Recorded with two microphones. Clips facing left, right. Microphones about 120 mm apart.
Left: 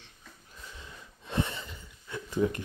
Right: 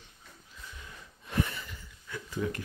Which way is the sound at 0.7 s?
25° left (ahead or behind).